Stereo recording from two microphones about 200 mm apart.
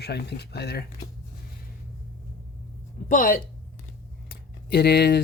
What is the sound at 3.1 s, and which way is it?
Speech, 45° left (ahead or behind).